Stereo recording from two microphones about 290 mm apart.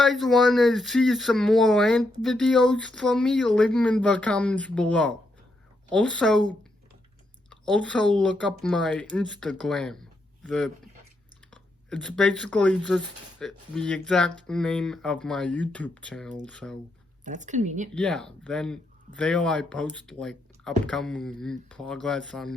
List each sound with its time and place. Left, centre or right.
0.0 s speech: centre
7.5 s speech: centre
17.2 s a woman's voice: right
17.9 s speech: centre